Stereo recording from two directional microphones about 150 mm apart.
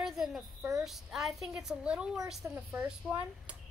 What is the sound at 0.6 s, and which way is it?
Speech, 20° right (ahead or behind).